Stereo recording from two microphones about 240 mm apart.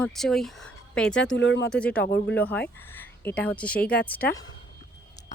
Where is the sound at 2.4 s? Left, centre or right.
Centre.